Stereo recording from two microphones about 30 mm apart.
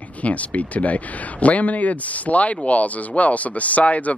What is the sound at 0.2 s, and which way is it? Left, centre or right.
Speech, left.